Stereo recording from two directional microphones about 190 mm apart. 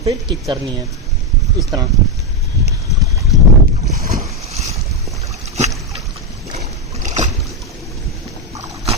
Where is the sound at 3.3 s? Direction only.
Centre (ahead or behind).